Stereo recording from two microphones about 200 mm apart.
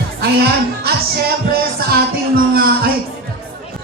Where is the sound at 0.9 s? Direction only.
50° right (ahead or behind).